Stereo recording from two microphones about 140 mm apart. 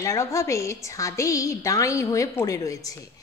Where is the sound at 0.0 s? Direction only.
20° left (ahead or behind).